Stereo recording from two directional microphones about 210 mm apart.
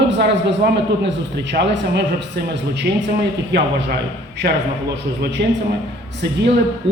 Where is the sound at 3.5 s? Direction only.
55° right (ahead or behind).